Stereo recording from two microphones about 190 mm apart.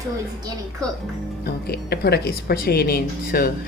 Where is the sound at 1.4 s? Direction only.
55° left (ahead or behind).